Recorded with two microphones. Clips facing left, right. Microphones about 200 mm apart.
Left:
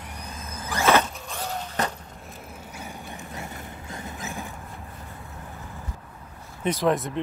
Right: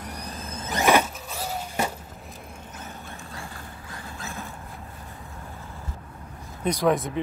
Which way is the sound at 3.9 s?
20° left (ahead or behind).